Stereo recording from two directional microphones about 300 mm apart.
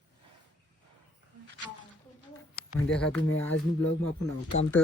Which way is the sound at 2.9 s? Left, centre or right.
Centre.